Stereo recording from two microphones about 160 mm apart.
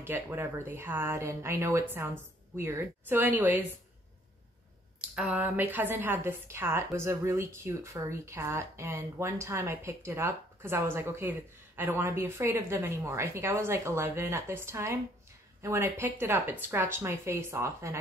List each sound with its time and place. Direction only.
0.0 s a woman's voice: 15° right (ahead or behind)
5.0 s a woman's voice: 5° right (ahead or behind)